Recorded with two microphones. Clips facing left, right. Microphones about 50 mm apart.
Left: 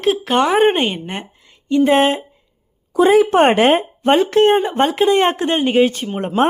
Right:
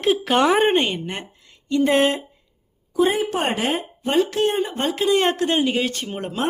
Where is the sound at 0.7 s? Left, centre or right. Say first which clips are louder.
Left 2 dB; centre.